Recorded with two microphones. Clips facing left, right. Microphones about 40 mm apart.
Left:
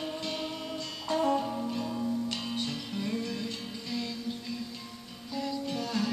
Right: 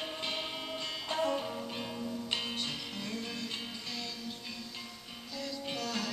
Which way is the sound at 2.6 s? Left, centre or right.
Centre.